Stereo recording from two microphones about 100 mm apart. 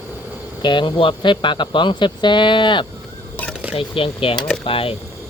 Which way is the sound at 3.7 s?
65° left (ahead or behind).